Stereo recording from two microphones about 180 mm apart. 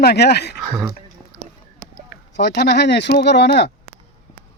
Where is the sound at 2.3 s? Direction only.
65° left (ahead or behind).